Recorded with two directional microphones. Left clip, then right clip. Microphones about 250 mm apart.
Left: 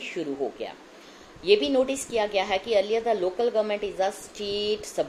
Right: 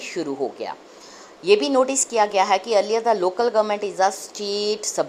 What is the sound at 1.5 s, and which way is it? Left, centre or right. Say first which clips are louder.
A woman's voice: right 4 dB; centre.